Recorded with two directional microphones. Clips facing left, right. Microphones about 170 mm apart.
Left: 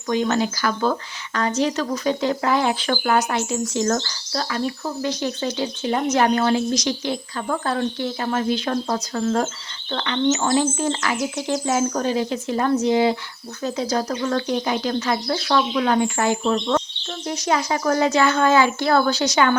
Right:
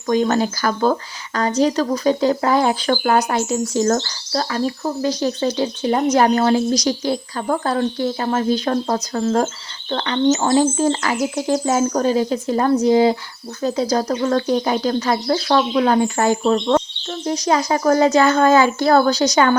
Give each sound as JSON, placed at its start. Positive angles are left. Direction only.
{"t": 0.1, "sound": "speech", "side_deg": -40}